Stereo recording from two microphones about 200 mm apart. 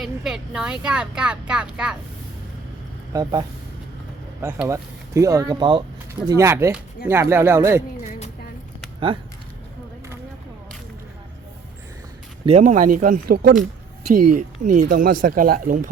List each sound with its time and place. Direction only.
0.0 s speech: centre (ahead or behind)
3.1 s speech: 20° right (ahead or behind)
12.5 s speech: 35° right (ahead or behind)